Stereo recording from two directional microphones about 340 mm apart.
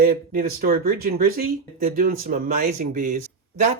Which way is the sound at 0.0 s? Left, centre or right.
Right.